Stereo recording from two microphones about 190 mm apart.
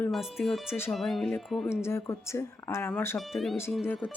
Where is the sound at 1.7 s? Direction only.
15° left (ahead or behind).